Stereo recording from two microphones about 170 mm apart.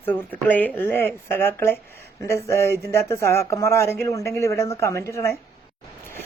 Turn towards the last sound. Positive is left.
turn(degrees=15)  # may be behind; listen again after turning